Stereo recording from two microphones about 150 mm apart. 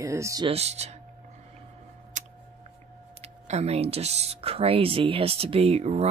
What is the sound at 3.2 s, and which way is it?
Speech, 45° right (ahead or behind).